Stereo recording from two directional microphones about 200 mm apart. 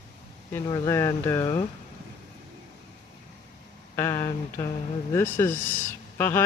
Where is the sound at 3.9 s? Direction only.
15° left (ahead or behind).